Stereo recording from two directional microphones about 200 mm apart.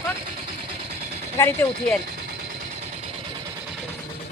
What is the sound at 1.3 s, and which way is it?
Speech, 10° left (ahead or behind).